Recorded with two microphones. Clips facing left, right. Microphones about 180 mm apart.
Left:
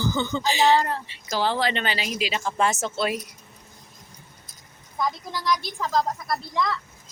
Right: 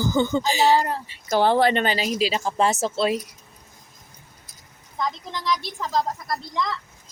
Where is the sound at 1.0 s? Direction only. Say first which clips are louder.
Right 6 dB; 50° right (ahead or behind); by 3.2 s 30° right (ahead or behind).